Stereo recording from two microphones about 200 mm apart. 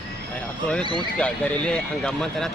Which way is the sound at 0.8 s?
20° right (ahead or behind).